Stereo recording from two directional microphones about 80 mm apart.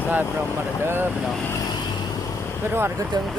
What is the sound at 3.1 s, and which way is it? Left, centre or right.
Speech, right.